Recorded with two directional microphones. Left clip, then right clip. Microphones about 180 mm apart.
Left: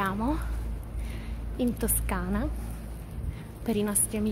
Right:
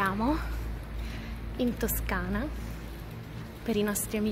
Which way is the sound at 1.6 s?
15° left (ahead or behind).